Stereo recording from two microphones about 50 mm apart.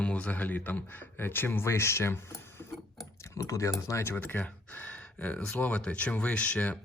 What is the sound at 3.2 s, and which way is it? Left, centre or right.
Speech, left.